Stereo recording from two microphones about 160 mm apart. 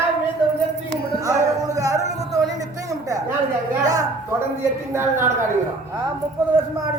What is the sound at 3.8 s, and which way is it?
A woman's voice, 20° right (ahead or behind).